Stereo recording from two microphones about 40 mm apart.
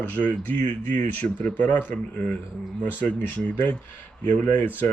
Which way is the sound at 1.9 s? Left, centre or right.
Left.